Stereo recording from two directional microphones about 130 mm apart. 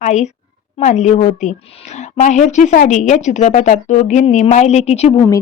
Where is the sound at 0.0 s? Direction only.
65° left (ahead or behind).